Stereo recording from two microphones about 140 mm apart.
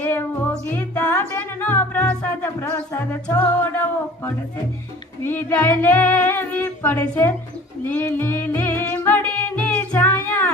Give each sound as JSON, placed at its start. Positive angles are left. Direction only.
{"t": 0.0, "sound": "music", "side_deg": 15}